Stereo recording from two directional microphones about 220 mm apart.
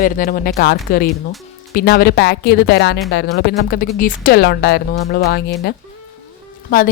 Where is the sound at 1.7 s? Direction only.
45° left (ahead or behind).